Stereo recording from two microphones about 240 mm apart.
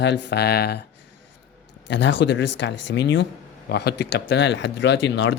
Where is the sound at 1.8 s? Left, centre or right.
Left.